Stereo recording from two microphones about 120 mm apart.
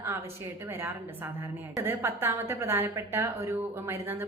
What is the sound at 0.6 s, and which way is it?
A woman's voice, 20° right (ahead or behind).